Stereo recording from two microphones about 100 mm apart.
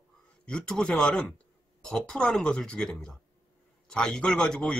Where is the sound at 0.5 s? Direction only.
10° left (ahead or behind).